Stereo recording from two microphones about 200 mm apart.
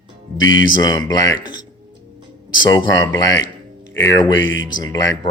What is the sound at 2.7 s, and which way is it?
Speech, 20° left (ahead or behind).